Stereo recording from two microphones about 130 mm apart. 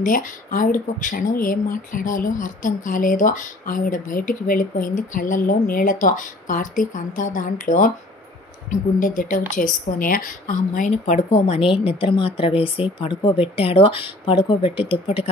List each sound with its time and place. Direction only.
0.0 s speech: 90° left
10.9 s a woman's voice: 55° left (ahead or behind)